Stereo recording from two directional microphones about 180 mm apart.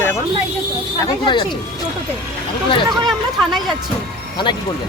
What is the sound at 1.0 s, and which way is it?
Speech, 25° left (ahead or behind).